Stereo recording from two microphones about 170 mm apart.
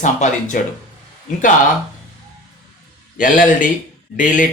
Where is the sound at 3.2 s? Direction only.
50° left (ahead or behind).